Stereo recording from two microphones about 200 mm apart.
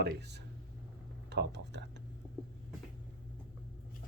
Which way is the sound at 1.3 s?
60° right (ahead or behind).